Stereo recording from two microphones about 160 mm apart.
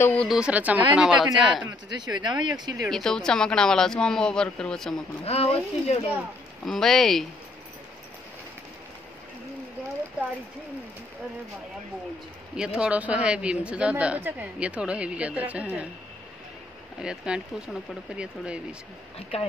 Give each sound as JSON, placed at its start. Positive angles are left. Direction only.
{"t": 0.0, "sound": "speech", "side_deg": 10}
{"t": 0.3, "sound": "a woman's voice", "side_deg": -5}
{"t": 1.6, "sound": "speech", "side_deg": -25}
{"t": 2.9, "sound": "a woman's voice", "side_deg": 5}
{"t": 5.2, "sound": "speech", "side_deg": 40}
{"t": 6.6, "sound": "a woman's voice", "side_deg": 0}
{"t": 12.5, "sound": "speech", "side_deg": -5}
{"t": 17.0, "sound": "a woman's voice", "side_deg": -5}